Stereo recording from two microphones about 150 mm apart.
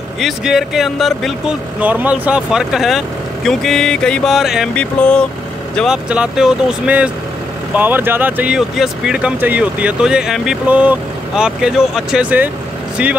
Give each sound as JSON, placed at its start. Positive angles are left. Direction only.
{"t": 0.2, "sound": "speech", "side_deg": -5}
{"t": 5.8, "sound": "speech", "side_deg": -5}